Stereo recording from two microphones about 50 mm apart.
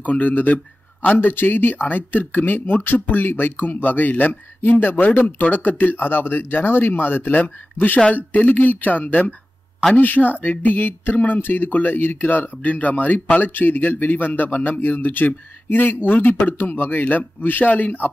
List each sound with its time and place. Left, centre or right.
0.0 s speech: left